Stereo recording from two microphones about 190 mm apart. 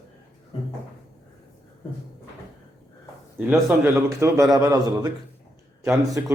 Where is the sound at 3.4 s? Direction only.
10° right (ahead or behind).